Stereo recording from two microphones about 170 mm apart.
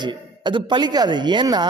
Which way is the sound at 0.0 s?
25° right (ahead or behind).